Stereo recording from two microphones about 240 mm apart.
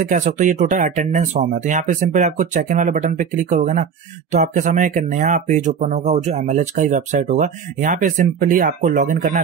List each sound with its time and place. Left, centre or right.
0.0 s speech: right